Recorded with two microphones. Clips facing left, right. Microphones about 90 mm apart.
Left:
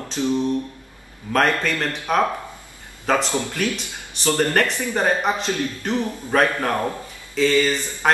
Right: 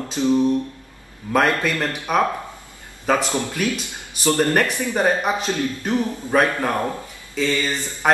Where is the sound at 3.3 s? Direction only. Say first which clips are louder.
Right 1 dB; 15° right (ahead or behind).